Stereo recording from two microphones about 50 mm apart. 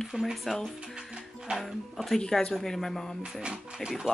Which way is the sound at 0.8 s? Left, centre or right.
Centre.